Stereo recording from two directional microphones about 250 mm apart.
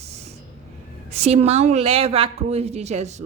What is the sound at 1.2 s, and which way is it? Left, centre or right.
Speech, right.